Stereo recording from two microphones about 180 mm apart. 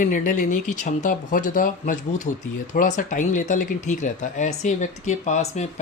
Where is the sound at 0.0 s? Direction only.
45° left (ahead or behind).